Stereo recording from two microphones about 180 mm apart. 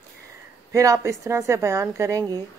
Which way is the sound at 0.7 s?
20° right (ahead or behind).